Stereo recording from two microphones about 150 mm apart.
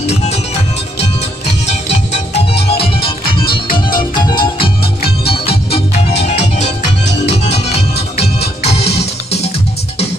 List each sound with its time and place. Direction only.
0.1 s music: 45° left (ahead or behind)
3.0 s music: 90° left
4.1 s music: 30° left (ahead or behind)